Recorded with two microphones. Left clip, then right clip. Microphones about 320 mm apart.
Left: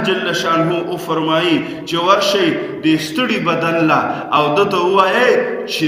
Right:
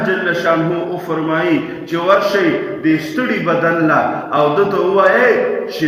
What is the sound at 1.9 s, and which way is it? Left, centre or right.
A man's voice, centre.